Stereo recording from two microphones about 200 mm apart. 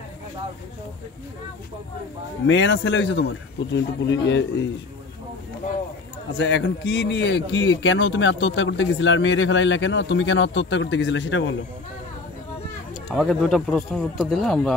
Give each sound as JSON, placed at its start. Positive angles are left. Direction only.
{"t": 2.4, "sound": "a man's voice", "side_deg": 65}
{"t": 6.3, "sound": "a man's voice", "side_deg": 65}
{"t": 13.1, "sound": "a man's voice", "side_deg": 0}